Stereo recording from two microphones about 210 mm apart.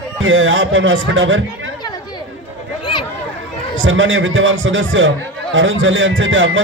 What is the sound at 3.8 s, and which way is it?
A man's voice, 65° right (ahead or behind).